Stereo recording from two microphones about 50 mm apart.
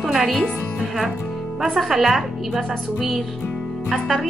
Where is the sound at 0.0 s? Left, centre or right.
Centre.